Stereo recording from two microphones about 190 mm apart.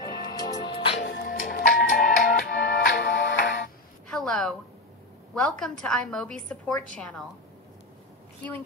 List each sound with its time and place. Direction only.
0.0 s music: 20° left (ahead or behind)
0.9 s music: 60° left (ahead or behind)
4.1 s a sound: 5° left (ahead or behind)
5.3 s a woman's voice: 5° left (ahead or behind)